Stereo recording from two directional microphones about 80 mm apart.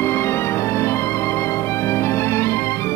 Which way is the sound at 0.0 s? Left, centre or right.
Left.